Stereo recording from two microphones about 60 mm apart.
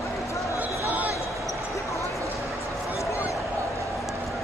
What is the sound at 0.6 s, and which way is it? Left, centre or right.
Basketball bounce, right.